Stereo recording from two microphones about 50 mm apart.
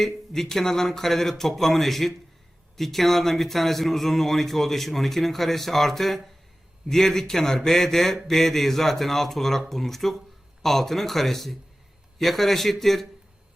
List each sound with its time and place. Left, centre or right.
0.0 s speech: centre